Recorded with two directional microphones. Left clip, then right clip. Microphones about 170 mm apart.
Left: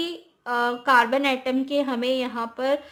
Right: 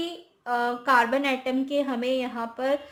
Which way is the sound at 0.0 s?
25° left (ahead or behind).